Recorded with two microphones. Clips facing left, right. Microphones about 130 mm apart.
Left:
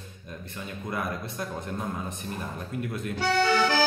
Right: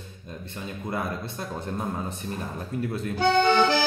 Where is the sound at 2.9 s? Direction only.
25° right (ahead or behind).